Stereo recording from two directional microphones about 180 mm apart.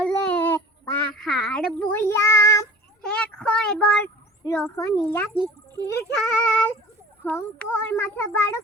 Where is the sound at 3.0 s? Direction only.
5° left (ahead or behind).